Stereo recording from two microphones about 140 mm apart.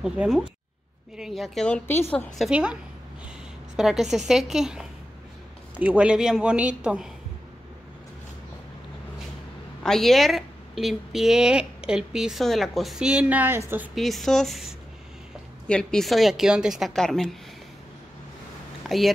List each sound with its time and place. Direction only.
0.0 s a woman's voice: 5° right (ahead or behind)
1.9 s a woman's voice: 15° left (ahead or behind)
2.3 s a woman's voice: 5° right (ahead or behind)
9.8 s a woman's voice: centre (ahead or behind); by 13.8 s 15° right (ahead or behind)
13.9 s a woman's voice: centre (ahead or behind)
18.9 s speech: centre (ahead or behind)